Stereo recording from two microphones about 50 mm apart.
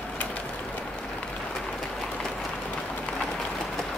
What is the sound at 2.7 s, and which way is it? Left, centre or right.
Run, centre.